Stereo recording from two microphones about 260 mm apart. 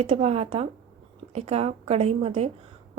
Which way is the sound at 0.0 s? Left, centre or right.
Right.